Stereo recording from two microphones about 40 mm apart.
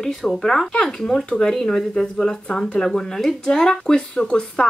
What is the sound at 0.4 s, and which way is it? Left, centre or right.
Speech, centre.